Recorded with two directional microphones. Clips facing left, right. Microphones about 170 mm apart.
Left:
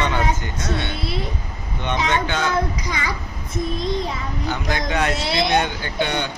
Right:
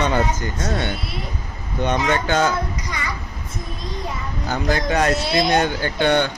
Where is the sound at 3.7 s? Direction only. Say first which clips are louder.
Left 5 dB; 90° left.